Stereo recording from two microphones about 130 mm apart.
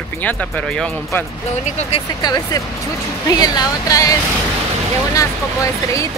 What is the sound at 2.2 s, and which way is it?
Speech, 30° left (ahead or behind).